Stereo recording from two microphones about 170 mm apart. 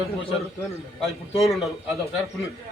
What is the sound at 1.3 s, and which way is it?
Speech, centre (ahead or behind).